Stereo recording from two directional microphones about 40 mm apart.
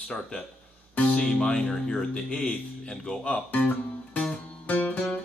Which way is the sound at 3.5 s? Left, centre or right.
Left.